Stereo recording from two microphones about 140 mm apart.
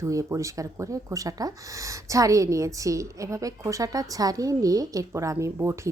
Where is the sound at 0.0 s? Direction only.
20° right (ahead or behind).